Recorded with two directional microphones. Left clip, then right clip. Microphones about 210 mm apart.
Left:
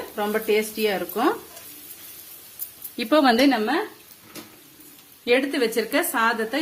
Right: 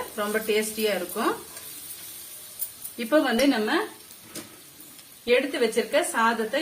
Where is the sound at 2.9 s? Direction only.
50° left (ahead or behind).